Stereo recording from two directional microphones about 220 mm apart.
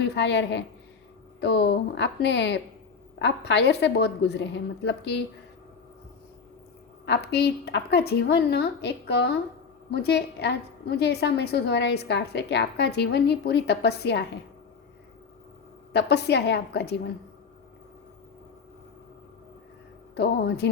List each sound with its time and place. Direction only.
0.0 s a woman's voice: 50° left (ahead or behind)
7.0 s a woman's voice: 50° left (ahead or behind)
15.9 s a woman's voice: 50° left (ahead or behind)
20.1 s a woman's voice: 50° left (ahead or behind)